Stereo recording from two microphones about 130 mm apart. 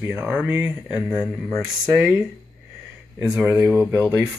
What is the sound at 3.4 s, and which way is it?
Speech, 15° right (ahead or behind).